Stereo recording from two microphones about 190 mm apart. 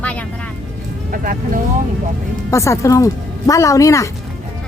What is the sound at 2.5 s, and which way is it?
A woman's voice, 15° left (ahead or behind).